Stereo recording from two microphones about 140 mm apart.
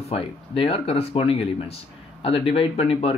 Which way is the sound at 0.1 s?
45° left (ahead or behind).